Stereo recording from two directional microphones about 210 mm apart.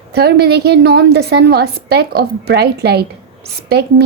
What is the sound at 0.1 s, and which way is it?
A woman's voice, 50° right (ahead or behind).